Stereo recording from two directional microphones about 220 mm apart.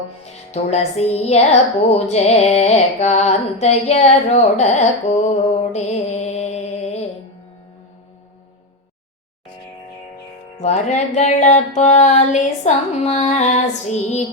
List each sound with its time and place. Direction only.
0.5 s music: 30° left (ahead or behind)
10.6 s music: 30° left (ahead or behind)